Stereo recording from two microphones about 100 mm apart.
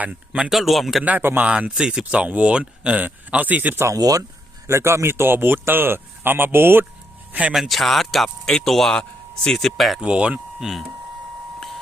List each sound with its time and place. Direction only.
0.0 s speech: 15° right (ahead or behind)
0.5 s speech: centre (ahead or behind)
1.0 s speech: 20° right (ahead or behind)
3.8 s speech: 35° right (ahead or behind)
7.5 s speech: centre (ahead or behind)
10.1 s speech: 10° right (ahead or behind)